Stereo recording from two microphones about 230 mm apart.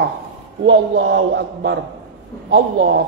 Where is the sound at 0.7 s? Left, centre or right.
Right.